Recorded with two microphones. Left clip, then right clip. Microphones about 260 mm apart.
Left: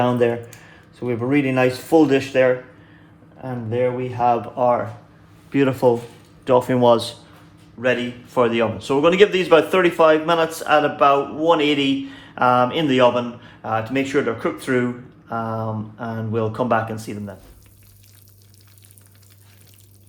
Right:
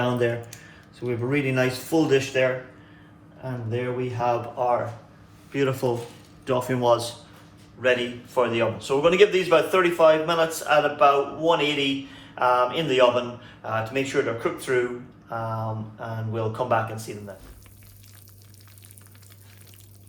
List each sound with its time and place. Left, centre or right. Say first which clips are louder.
0.0 s a man's voice: left 6 dB; left
16.0 s a man's voice: left 7 dB; left